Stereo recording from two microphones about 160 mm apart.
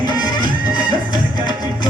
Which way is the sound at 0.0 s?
25° left (ahead or behind).